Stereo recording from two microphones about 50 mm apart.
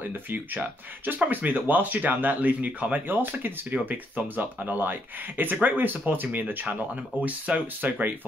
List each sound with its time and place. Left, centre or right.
0.0 s speech: right